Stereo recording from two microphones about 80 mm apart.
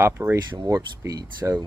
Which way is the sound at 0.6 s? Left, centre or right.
Right.